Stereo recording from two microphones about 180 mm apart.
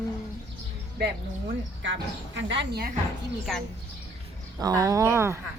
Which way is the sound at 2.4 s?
85° right.